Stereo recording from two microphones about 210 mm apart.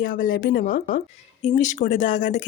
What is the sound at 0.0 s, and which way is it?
Speech, 40° left (ahead or behind).